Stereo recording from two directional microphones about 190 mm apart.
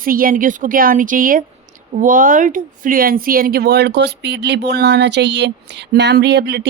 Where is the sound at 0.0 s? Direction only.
50° right (ahead or behind).